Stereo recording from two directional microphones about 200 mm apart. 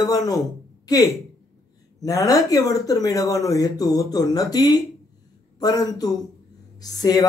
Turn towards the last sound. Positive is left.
turn(degrees=20)  # may be behind; listen again after turning